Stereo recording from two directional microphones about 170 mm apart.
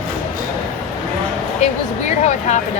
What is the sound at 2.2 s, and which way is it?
Speech, 45° left (ahead or behind).